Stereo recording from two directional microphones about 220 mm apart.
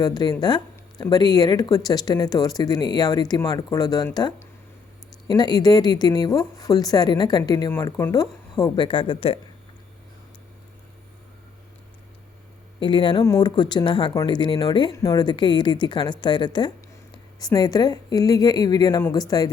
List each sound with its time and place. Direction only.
0.0 s speech: 20° left (ahead or behind)
12.8 s speech: 20° left (ahead or behind)